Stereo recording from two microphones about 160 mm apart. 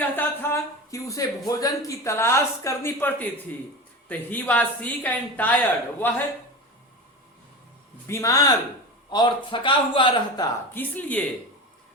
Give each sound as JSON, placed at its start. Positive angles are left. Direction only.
{"t": 0.0, "sound": "a sound", "side_deg": 15}
{"t": 1.5, "sound": "speech", "side_deg": 20}
{"t": 8.0, "sound": "speech", "side_deg": 20}
{"t": 10.8, "sound": "speech", "side_deg": 10}